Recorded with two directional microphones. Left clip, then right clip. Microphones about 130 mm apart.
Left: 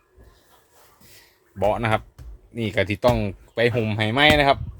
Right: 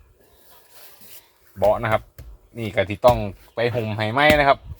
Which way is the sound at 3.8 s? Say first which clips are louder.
Even; 45° left (ahead or behind).